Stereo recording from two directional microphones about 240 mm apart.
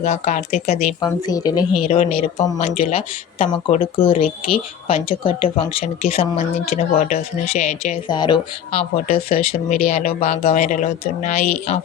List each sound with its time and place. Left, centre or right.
0.0 s speech: left
1.0 s speech: centre
9.5 s speech: left
9.8 s speech: left